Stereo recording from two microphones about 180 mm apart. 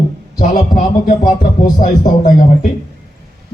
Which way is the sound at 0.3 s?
50° left (ahead or behind).